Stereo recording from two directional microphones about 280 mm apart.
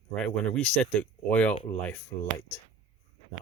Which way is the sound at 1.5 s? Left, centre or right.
Left.